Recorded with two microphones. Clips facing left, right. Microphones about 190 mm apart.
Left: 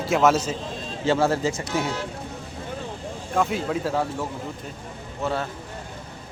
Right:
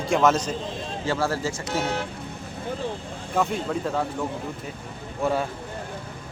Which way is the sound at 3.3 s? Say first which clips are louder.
Left 1 dB; 5° left (ahead or behind).